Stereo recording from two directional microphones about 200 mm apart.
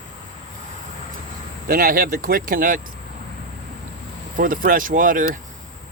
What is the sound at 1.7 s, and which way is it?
Speech, 45° right (ahead or behind).